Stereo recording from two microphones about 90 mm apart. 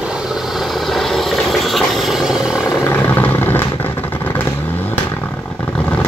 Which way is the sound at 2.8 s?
20° left (ahead or behind).